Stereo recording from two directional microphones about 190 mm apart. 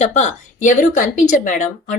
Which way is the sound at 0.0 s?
35° left (ahead or behind).